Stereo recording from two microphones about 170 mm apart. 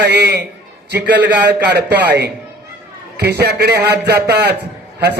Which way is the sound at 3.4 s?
75° right (ahead or behind).